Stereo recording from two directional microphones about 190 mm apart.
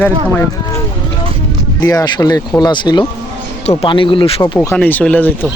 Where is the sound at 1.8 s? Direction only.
20° left (ahead or behind).